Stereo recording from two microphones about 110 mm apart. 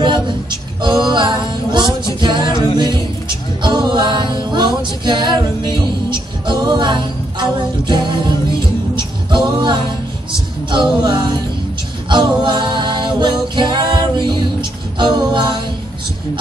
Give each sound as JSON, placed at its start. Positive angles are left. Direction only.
{"t": 0.8, "sound": "music", "side_deg": -45}